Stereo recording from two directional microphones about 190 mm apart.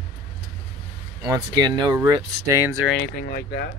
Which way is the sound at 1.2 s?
20° right (ahead or behind).